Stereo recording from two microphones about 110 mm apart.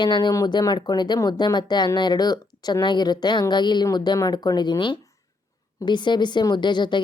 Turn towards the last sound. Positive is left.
turn(degrees=45)  # may be behind; listen again after turning